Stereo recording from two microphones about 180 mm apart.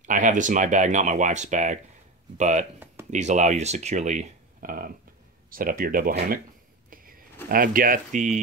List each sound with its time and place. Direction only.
0.0 s speech: 45° right (ahead or behind)
7.4 s speech: 55° right (ahead or behind)